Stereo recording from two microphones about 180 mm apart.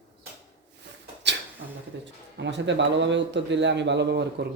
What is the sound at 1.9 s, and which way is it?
Speech, 70° right (ahead or behind).